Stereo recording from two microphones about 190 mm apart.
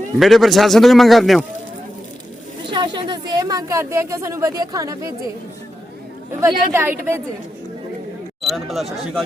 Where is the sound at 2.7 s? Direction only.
25° right (ahead or behind).